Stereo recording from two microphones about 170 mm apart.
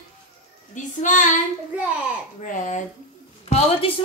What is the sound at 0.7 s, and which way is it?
Child singing, 45° left (ahead or behind).